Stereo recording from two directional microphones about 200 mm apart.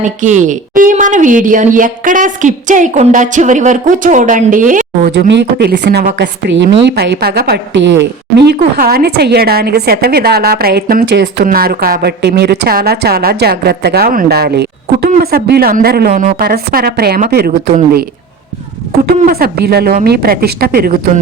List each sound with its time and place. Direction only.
0.2 s speech: 40° right (ahead or behind)
5.3 s a woman's voice: 60° right (ahead or behind)
11.4 s a woman's voice: 45° right (ahead or behind)
19.0 s a woman's voice: 50° right (ahead or behind)